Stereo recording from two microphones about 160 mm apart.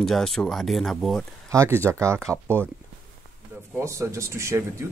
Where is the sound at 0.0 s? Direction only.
Centre (ahead or behind).